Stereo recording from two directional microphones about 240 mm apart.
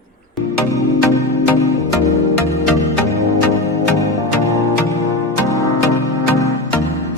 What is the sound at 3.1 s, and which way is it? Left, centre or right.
Music, centre.